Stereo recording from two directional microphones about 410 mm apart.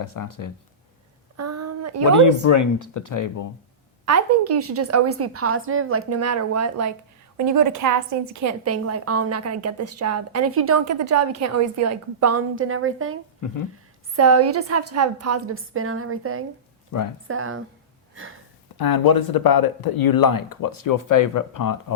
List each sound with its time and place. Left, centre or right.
0.0 s speech: left
1.4 s a sound: right
2.2 s speech: left
4.0 s a woman's voice: right
14.2 s a woman's voice: right
16.9 s speech: left
17.2 s a woman's voice: right
18.1 s sniff: right
18.8 s speech: left